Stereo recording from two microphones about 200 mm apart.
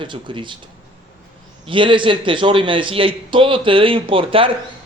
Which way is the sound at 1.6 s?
25° right (ahead or behind).